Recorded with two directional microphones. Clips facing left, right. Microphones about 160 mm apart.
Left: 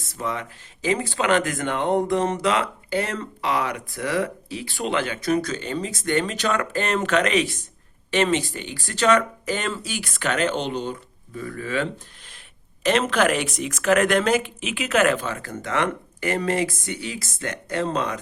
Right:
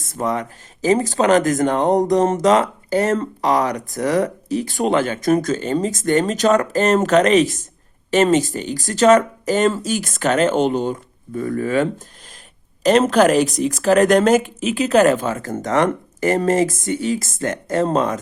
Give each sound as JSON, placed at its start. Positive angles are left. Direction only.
{"t": 0.0, "sound": "speech", "side_deg": -50}